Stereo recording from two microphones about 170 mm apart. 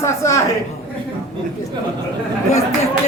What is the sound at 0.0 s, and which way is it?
Speech, 15° left (ahead or behind).